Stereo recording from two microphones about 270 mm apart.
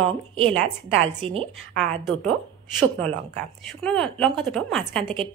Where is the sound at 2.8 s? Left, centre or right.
Centre.